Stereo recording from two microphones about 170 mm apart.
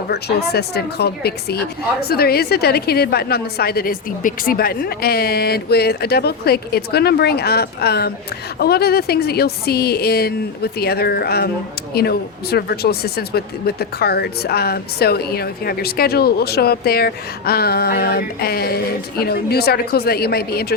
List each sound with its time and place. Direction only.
0.1 s speech: 70° left (ahead or behind)